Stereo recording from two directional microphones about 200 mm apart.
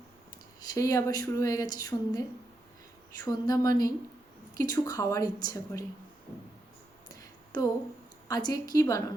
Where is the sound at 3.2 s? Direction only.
15° left (ahead or behind).